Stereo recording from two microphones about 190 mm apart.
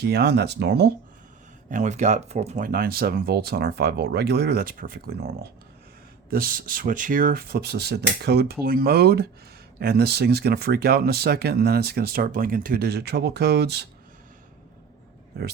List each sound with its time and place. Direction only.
0.0 s speech: 60° right (ahead or behind)
1.7 s speech: 40° right (ahead or behind); by 13.8 s 60° right (ahead or behind)